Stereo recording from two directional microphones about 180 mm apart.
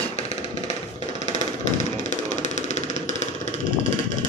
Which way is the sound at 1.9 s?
40° left (ahead or behind).